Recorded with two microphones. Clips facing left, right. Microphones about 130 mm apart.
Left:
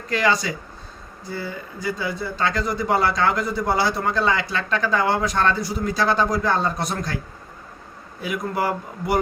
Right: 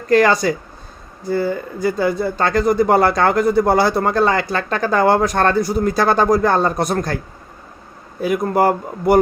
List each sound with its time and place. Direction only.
0.1 s speech: 50° right (ahead or behind)
8.2 s speech: 45° right (ahead or behind)